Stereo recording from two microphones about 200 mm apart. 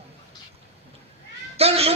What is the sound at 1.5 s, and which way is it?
Speech, 30° right (ahead or behind).